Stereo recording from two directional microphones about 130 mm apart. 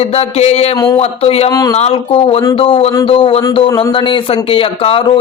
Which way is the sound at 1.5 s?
30° left (ahead or behind).